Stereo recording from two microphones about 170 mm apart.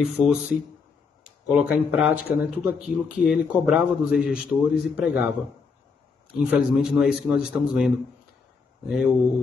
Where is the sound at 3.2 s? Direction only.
5° right (ahead or behind).